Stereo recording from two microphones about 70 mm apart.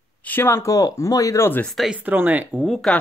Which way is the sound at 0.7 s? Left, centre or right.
Left.